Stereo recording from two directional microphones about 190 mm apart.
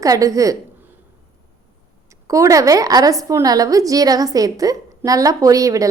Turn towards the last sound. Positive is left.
turn(degrees=-15)  # may be behind; listen again after turning